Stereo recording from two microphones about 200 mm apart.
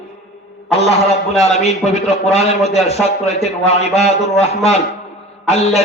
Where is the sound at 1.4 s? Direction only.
30° left (ahead or behind).